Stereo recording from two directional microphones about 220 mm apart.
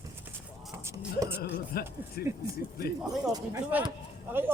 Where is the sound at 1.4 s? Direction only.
45° left (ahead or behind).